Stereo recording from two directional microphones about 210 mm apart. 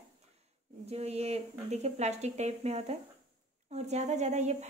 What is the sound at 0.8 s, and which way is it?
Speech, 30° right (ahead or behind).